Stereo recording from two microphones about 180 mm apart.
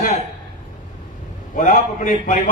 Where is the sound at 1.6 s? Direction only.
45° left (ahead or behind).